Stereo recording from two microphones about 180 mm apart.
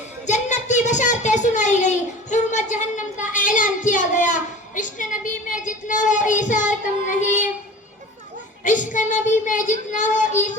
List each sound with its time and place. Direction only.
0.3 s a sound: 40° left (ahead or behind)
5.5 s child singing: 45° left (ahead or behind)
8.6 s child singing: 45° left (ahead or behind)